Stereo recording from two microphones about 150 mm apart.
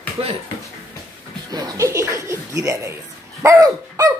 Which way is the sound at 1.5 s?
20° right (ahead or behind).